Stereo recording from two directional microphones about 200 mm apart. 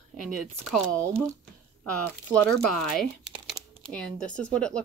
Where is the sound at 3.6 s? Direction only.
15° right (ahead or behind).